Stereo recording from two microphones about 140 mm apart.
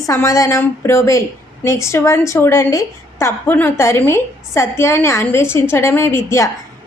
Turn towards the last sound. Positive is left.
turn(degrees=20)  # may be behind; listen again after turning